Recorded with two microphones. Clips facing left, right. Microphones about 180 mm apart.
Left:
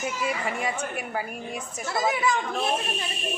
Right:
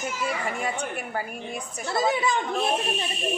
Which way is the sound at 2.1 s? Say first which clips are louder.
Even; 25° right (ahead or behind).